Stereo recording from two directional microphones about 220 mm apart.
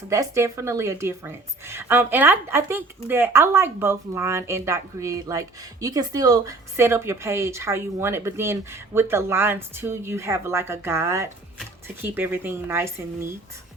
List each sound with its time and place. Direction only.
0.1 s a woman's voice: 15° right (ahead or behind)